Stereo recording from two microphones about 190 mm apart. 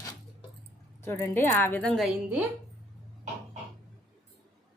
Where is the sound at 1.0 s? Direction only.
15° left (ahead or behind); by 2.4 s 5° right (ahead or behind).